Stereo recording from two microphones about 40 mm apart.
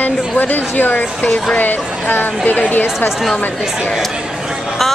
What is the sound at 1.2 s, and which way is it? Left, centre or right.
Speech, left.